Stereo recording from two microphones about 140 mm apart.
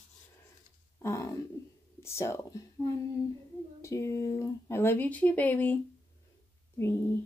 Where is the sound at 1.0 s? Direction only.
20° left (ahead or behind).